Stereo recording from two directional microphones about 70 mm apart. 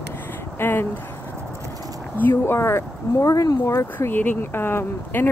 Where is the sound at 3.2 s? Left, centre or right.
Left.